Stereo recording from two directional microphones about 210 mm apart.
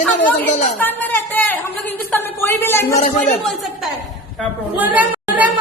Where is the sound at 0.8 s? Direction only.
10° left (ahead or behind).